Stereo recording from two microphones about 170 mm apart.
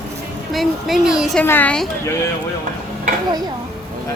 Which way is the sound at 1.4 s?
10° left (ahead or behind).